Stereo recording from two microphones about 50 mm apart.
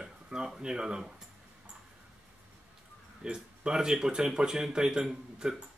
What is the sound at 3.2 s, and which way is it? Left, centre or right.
Speech, centre.